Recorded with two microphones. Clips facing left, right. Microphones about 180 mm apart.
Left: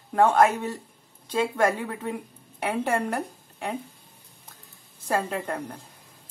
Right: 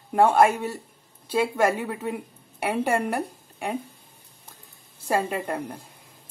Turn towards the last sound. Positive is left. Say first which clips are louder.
# right 2 dB
turn(degrees=-10)  # may be behind; listen again after turning